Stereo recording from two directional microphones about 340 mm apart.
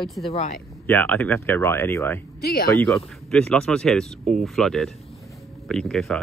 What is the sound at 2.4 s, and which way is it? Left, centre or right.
Speech, left.